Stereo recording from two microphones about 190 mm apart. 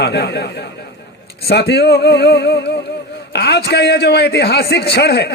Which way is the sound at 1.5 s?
60° left (ahead or behind).